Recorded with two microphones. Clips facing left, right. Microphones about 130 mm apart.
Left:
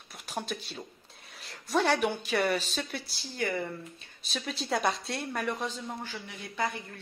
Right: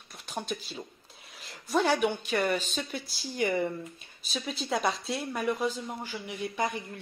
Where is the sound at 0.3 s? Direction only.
Centre (ahead or behind).